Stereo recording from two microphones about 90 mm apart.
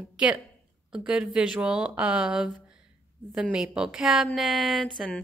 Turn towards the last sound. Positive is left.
turn(degrees=-5)  # may be behind; listen again after turning